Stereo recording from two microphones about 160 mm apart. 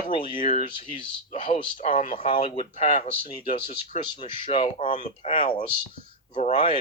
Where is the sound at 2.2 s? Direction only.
35° left (ahead or behind).